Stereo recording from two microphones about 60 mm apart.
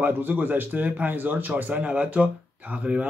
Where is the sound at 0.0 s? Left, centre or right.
Right.